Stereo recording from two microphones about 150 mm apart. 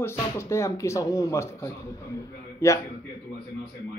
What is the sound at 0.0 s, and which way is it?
Speech, 15° left (ahead or behind).